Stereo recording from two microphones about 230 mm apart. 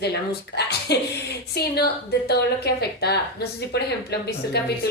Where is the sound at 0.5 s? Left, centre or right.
Left.